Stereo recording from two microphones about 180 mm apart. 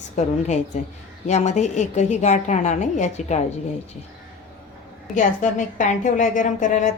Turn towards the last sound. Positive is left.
turn(degrees=40)  # may be behind; listen again after turning